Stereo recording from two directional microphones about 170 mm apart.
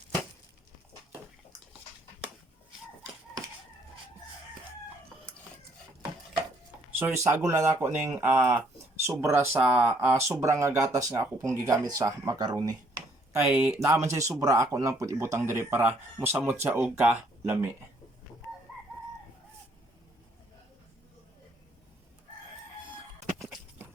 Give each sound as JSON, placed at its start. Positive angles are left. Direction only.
{"t": 7.0, "sound": "speech", "side_deg": -15}
{"t": 13.3, "sound": "speech", "side_deg": -10}